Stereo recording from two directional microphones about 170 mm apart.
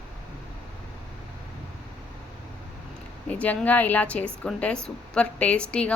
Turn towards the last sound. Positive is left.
turn(degrees=5)  # may be behind; listen again after turning